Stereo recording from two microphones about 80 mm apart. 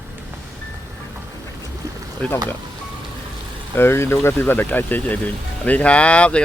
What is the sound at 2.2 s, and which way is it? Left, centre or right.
Speech, centre.